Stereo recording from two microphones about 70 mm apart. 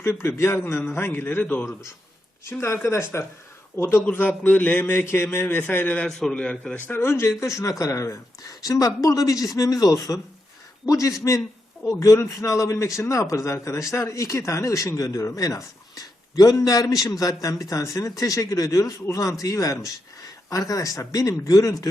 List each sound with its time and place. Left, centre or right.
0.0 s a man's voice: left
2.5 s a man's voice: left
6.1 s a man's voice: centre
6.8 s a man's voice: left
8.4 s a man's voice: left